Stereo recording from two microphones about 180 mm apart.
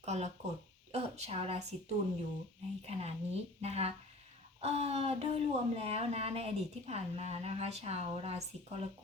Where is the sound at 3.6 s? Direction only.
35° right (ahead or behind).